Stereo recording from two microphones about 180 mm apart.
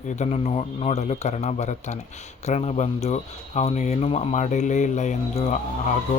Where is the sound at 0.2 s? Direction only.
40° left (ahead or behind).